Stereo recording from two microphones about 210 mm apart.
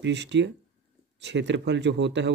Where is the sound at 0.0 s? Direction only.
55° right (ahead or behind).